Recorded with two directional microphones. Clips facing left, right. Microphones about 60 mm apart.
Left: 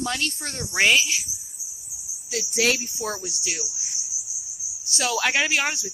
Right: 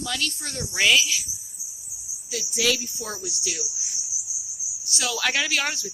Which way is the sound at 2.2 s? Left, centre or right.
Left.